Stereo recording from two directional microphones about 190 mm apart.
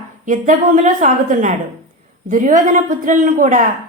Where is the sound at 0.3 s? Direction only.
40° right (ahead or behind).